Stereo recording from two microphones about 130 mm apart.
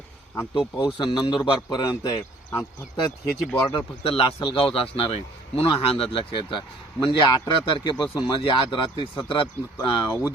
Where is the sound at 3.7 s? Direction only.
40° left (ahead or behind).